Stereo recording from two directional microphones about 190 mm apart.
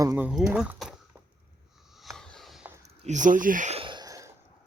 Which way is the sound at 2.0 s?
5° left (ahead or behind).